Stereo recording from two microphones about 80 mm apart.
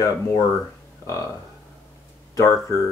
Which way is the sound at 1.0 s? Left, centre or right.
Left.